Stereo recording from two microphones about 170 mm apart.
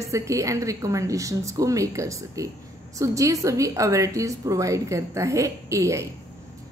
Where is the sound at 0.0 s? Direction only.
20° right (ahead or behind).